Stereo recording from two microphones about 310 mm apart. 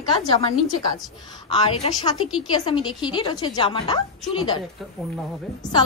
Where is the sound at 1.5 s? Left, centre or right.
Centre.